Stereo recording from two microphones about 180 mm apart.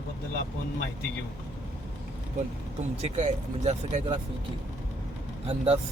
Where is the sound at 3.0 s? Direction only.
35° right (ahead or behind).